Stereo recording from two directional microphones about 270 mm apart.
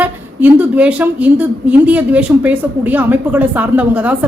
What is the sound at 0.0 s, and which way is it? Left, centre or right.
A woman's voice, centre.